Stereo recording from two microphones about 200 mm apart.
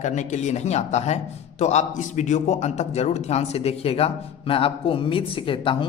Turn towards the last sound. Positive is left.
turn(degrees=25)  # may be behind; listen again after turning